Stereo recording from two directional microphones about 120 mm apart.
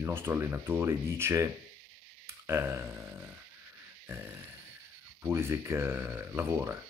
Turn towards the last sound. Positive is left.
turn(degrees=-20)  # may be behind; listen again after turning